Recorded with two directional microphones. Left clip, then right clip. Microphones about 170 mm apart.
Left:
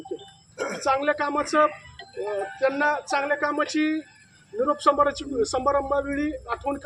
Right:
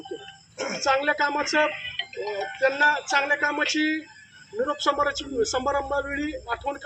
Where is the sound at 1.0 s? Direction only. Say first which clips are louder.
Right 1 dB; 35° left (ahead or behind).